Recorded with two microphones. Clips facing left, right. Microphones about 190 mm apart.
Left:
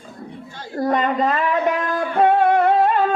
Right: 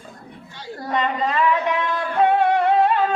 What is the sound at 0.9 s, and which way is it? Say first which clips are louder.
Music: left 3 dB; 50° left (ahead or behind).